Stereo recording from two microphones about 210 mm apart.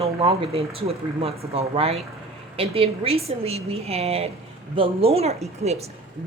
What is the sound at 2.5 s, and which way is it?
Speech, 25° right (ahead or behind).